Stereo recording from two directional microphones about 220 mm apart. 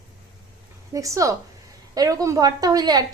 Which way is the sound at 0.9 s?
15° right (ahead or behind).